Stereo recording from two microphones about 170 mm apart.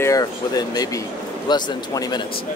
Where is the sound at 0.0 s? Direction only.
20° left (ahead or behind).